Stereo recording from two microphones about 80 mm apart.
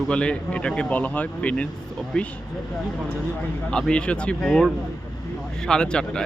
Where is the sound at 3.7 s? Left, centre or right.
Centre.